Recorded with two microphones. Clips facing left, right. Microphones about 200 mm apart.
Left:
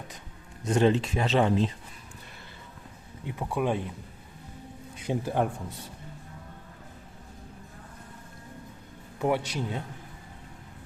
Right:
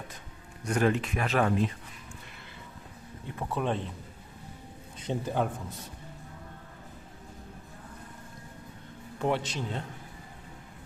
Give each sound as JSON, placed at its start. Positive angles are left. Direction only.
{"t": 0.6, "sound": "speech", "side_deg": 25}
{"t": 3.2, "sound": "speech", "side_deg": 10}
{"t": 4.9, "sound": "speech", "side_deg": 10}
{"t": 9.2, "sound": "speech", "side_deg": 10}